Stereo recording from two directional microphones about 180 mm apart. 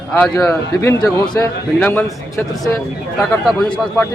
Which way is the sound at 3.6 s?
15° left (ahead or behind).